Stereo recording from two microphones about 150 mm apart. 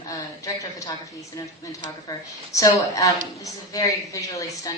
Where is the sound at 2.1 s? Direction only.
20° left (ahead or behind).